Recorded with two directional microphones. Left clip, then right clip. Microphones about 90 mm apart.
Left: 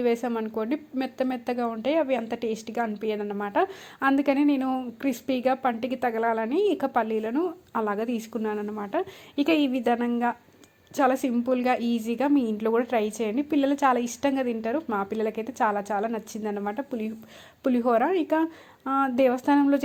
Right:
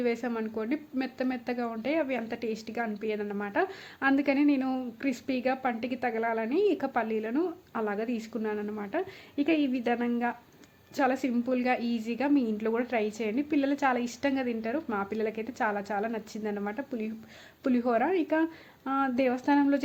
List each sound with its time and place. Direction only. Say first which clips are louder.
0.0 s speech: left 5 dB; 30° left (ahead or behind)
9.7 s speech: left 4 dB; 30° left (ahead or behind)